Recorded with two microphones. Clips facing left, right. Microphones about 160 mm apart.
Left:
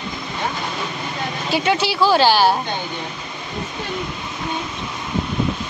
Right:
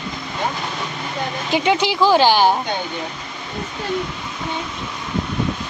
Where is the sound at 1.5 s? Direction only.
15° right (ahead or behind).